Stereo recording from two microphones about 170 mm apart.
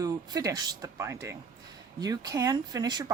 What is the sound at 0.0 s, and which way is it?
Speech, 20° right (ahead or behind).